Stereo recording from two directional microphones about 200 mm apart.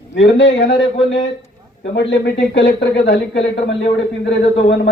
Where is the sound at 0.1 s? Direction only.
60° left (ahead or behind).